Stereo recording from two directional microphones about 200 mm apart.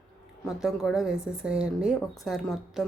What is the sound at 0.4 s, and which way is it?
Speech, centre (ahead or behind).